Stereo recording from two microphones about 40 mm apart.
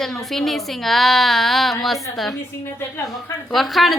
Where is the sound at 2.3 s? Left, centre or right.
Left.